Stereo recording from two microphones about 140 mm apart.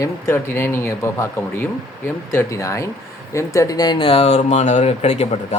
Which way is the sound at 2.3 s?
20° left (ahead or behind).